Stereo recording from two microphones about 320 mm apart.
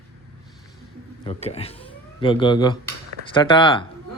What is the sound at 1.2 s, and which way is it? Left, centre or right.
A man's voice, centre.